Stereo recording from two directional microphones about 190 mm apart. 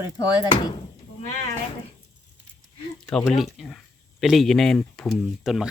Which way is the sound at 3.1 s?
Centre (ahead or behind).